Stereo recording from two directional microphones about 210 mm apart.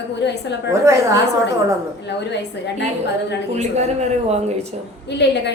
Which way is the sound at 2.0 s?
55° left (ahead or behind).